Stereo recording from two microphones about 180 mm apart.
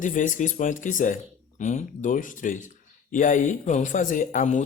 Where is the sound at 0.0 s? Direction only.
45° left (ahead or behind).